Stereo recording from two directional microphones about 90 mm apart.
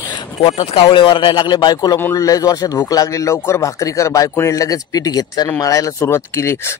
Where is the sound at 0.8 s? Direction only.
60° left (ahead or behind).